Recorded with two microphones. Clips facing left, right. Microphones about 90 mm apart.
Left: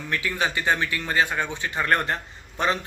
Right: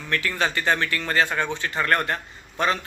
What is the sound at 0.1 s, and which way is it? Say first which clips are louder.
Speech: right 2 dB; 15° left (ahead or behind).